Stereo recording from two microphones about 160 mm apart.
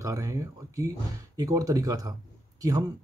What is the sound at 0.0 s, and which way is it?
Speech, 20° right (ahead or behind).